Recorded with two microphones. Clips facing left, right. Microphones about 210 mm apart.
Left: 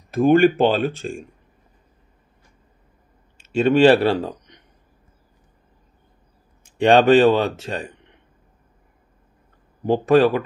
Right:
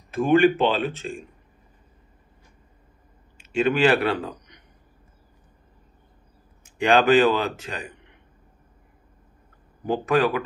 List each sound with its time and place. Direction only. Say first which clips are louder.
0.2 s speech: left 3 dB; 45° left (ahead or behind)
3.5 s speech: left 6 dB; 30° left (ahead or behind)
6.8 s speech: left 4 dB; 30° left (ahead or behind)
9.8 s speech: left 6 dB; 25° left (ahead or behind)